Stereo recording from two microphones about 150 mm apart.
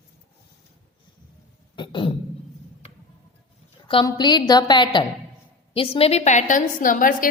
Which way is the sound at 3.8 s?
30° left (ahead or behind).